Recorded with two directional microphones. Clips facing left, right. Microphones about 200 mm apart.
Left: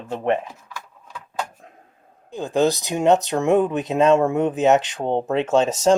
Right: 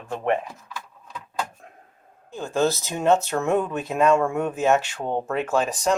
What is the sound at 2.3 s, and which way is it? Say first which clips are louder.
Speech: left 3 dB; 15° left (ahead or behind).